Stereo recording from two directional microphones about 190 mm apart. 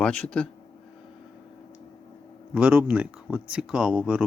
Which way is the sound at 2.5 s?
5° right (ahead or behind).